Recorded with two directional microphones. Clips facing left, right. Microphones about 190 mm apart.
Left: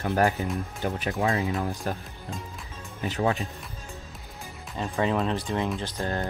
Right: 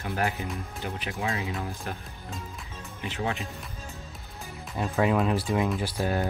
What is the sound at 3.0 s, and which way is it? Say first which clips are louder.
Speech: left 5 dB; 40° left (ahead or behind).